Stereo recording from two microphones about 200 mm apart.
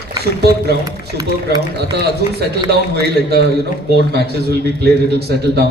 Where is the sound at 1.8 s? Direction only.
55° right (ahead or behind).